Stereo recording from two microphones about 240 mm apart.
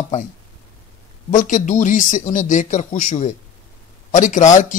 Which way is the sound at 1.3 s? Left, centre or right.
Left.